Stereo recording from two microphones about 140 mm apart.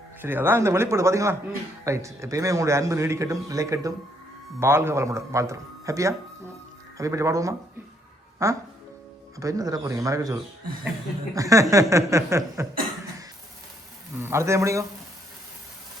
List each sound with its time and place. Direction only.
0.2 s a man's voice: 15° right (ahead or behind)
11.3 s a man's voice: 25° right (ahead or behind)
14.2 s a man's voice: 20° right (ahead or behind)